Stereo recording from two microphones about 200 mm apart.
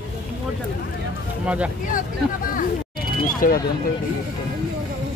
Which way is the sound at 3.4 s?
45° left (ahead or behind).